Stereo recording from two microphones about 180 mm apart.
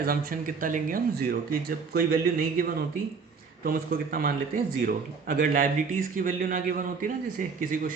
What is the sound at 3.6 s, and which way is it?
A man's voice, 55° right (ahead or behind).